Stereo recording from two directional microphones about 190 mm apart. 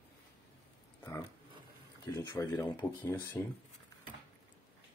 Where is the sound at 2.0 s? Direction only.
20° left (ahead or behind).